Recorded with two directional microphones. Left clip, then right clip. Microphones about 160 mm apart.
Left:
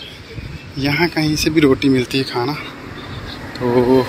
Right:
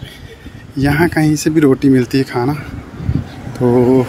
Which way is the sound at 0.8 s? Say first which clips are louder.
Right 3 dB; 60° right (ahead or behind).